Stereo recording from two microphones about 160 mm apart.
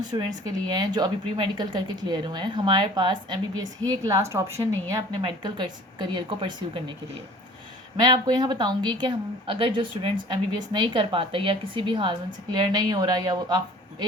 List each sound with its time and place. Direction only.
0.0 s speech: 25° right (ahead or behind)
8.0 s speech: 25° right (ahead or behind)